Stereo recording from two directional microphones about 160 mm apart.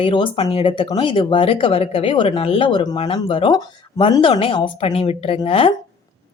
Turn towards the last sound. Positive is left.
turn(degrees=35)  # may be behind; listen again after turning